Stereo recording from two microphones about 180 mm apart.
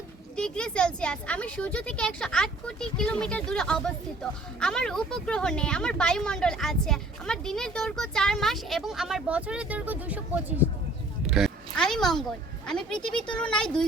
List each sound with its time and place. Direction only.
0.3 s speech: 5° left (ahead or behind)
11.3 s a sound: centre (ahead or behind)
12.6 s speech: 5° left (ahead or behind)